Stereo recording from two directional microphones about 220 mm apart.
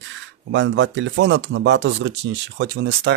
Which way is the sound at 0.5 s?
55° right (ahead or behind).